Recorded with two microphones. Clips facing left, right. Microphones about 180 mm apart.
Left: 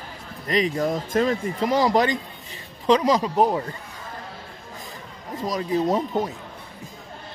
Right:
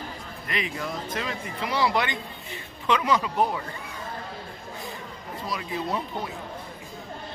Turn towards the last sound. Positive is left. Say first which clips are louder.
# left 8 dB
turn(degrees=40)  # may be behind; listen again after turning